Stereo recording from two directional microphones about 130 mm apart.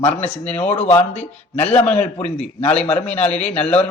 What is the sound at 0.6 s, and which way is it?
Speech, 55° left (ahead or behind).